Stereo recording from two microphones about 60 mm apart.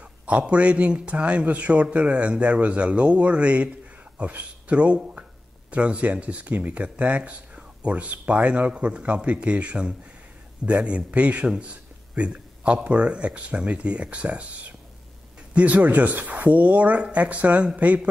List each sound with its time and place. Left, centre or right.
0.0 s a man's voice: centre
15.5 s speech: right